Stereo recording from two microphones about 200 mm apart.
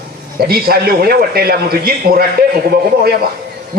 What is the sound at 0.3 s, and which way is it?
A man's voice, 50° right (ahead or behind).